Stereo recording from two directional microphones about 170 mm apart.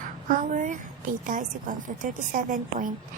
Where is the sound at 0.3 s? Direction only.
50° right (ahead or behind).